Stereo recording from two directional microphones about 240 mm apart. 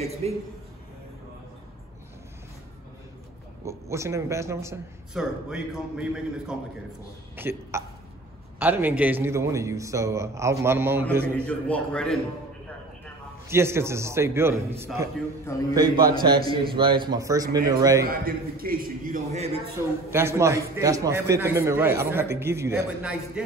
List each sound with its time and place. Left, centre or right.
0.0 s a man's voice: right
3.6 s a man's voice: centre
11.3 s a man's voice: centre
13.5 s a man's voice: centre
15.1 s a man's voice: centre
15.7 s a man's voice: centre
18.0 s a man's voice: right
20.1 s a man's voice: centre